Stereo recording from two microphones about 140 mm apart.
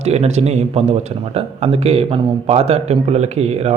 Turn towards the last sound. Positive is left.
turn(degrees=-50)  # may be behind; listen again after turning